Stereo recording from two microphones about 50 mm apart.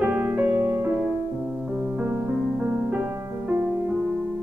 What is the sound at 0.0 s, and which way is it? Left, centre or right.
Music, right.